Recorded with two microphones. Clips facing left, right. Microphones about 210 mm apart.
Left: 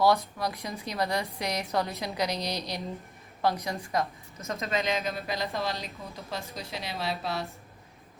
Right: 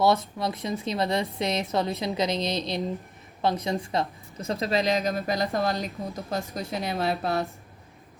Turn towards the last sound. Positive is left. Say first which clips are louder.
# right 6 dB
turn(degrees=-50)  # may be behind; listen again after turning